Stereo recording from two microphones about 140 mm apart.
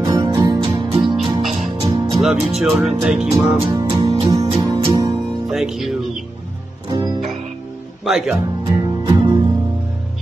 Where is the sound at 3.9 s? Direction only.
35° right (ahead or behind).